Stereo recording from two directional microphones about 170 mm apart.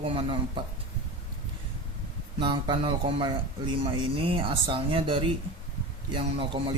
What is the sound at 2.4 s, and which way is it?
Speech, 30° right (ahead or behind).